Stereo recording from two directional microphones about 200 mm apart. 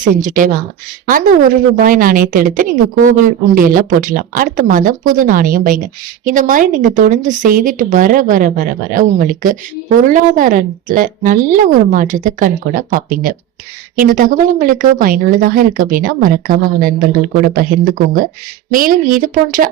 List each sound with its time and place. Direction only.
0.0 s a woman's voice: 40° right (ahead or behind)